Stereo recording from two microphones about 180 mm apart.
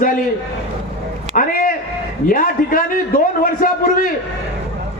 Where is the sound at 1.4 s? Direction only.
45° left (ahead or behind).